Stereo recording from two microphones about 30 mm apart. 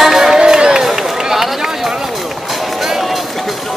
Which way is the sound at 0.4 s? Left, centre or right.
Right.